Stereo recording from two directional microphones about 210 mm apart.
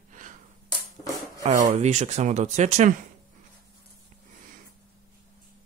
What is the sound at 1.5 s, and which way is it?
Speech, 35° right (ahead or behind).